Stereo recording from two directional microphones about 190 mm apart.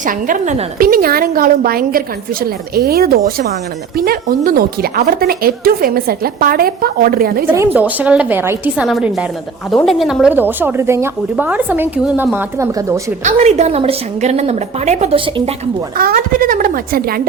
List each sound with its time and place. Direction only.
0.0 s speech: 45° right (ahead or behind)
7.5 s a woman's voice: 10° right (ahead or behind)
13.2 s a woman's voice: 35° right (ahead or behind)
16.0 s speech: 45° right (ahead or behind)